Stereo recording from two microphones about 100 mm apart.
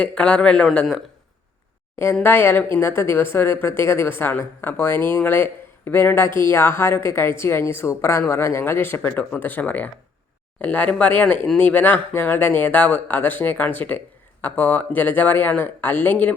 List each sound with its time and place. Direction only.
0.0 s speech: 10° left (ahead or behind)
2.2 s speech: 20° left (ahead or behind)